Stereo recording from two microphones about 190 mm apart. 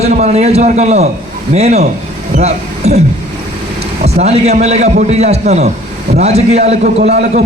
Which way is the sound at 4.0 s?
35° right (ahead or behind).